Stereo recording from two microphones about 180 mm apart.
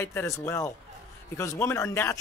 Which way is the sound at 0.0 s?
15° left (ahead or behind).